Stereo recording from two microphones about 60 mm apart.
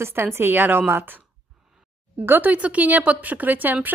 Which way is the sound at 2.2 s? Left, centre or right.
Right.